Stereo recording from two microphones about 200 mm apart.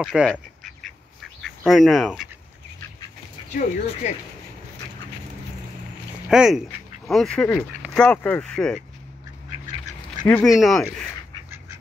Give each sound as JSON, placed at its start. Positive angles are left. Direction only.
{"t": 0.0, "sound": "speech", "side_deg": 0}
{"t": 1.4, "sound": "speech", "side_deg": 0}
{"t": 3.5, "sound": "speech", "side_deg": 40}
{"t": 6.2, "sound": "speech", "side_deg": -5}
{"t": 10.2, "sound": "speech", "side_deg": 5}